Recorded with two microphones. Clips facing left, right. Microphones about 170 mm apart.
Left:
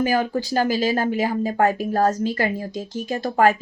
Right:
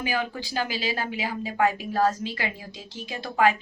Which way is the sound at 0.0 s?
45° left (ahead or behind).